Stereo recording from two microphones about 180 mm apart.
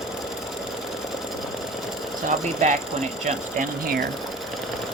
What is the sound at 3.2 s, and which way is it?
Speech, 45° right (ahead or behind).